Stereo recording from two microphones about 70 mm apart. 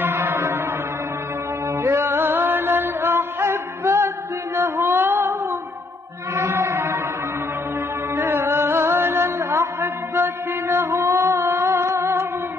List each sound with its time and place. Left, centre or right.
0.0 s music: right
1.7 s music: right
8.1 s music: right